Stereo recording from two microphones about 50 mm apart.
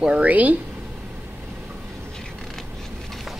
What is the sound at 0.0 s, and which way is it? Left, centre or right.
Speech, right.